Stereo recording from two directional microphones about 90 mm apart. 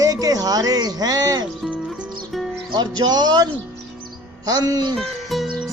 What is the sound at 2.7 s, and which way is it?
Music, 50° right (ahead or behind).